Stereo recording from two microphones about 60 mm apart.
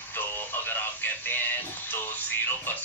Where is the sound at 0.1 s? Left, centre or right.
Left.